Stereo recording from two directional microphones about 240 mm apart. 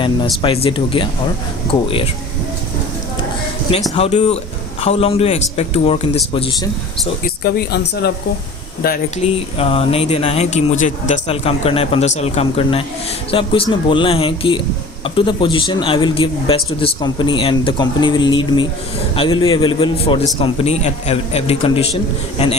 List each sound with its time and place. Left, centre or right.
0.4 s a man's voice: left
3.9 s a man's voice: left
7.3 s speech: left
9.3 s a man's voice: left